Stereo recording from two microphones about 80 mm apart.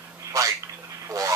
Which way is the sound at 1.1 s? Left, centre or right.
Right.